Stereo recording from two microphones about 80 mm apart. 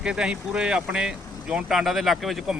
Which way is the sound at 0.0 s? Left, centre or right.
Centre.